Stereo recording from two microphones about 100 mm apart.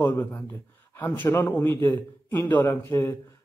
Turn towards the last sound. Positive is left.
turn(degrees=25)  # may be behind; listen again after turning